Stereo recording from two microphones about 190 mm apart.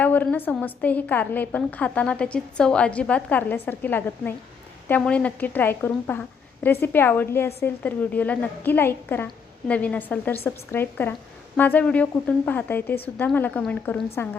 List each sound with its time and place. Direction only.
0.0 s a woman's voice: 10° left (ahead or behind)